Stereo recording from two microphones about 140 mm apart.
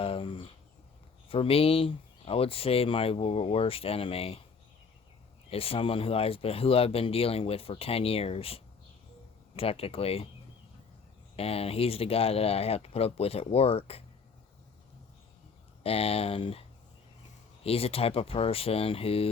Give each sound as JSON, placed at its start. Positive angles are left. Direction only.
{"t": 0.0, "sound": "speech", "side_deg": 40}
{"t": 5.5, "sound": "speech", "side_deg": 45}
{"t": 11.3, "sound": "speech", "side_deg": 45}
{"t": 15.8, "sound": "speech", "side_deg": 45}